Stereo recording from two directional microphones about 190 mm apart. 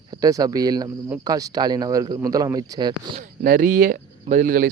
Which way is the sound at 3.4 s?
45° right (ahead or behind).